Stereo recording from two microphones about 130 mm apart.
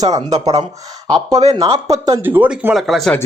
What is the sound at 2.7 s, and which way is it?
Speech, centre (ahead or behind).